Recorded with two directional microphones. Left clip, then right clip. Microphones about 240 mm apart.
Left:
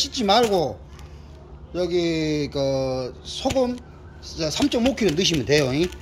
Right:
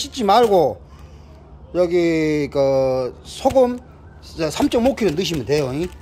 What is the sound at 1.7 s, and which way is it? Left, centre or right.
Speech, centre.